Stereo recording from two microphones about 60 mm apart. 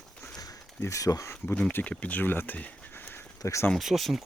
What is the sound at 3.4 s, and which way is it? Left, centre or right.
Speech, left.